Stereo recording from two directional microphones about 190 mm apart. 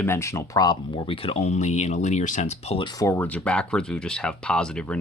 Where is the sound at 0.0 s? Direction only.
15° left (ahead or behind).